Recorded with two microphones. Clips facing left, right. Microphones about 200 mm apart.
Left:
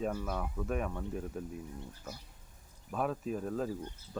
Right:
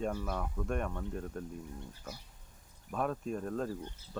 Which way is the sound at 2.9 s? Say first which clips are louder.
Even; 5° left (ahead or behind).